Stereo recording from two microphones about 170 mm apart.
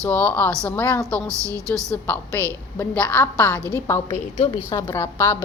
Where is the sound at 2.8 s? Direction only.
10° left (ahead or behind).